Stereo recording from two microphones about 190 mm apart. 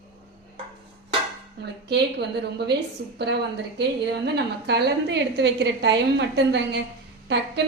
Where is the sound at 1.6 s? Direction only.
60° right (ahead or behind).